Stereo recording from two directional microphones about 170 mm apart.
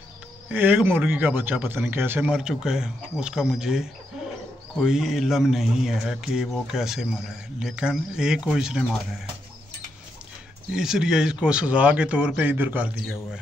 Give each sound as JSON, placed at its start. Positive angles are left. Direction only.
{"t": 0.5, "sound": "a man's voice", "side_deg": -10}
{"t": 10.7, "sound": "speech", "side_deg": -5}